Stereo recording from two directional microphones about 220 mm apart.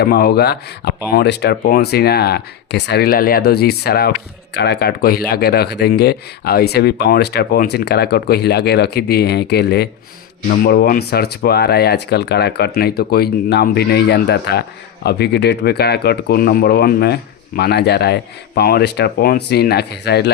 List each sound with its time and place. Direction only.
0.0 s speech: 45° left (ahead or behind)